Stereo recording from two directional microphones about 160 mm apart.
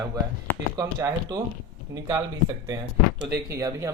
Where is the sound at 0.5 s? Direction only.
15° left (ahead or behind).